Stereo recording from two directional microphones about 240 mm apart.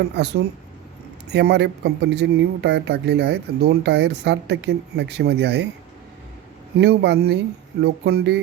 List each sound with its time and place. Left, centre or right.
1.3 s speech: right
6.7 s speech: right